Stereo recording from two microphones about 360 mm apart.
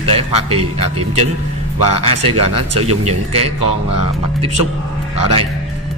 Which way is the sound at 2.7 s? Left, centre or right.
Centre.